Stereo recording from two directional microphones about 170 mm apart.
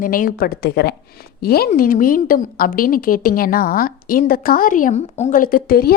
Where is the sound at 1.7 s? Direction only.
55° left (ahead or behind).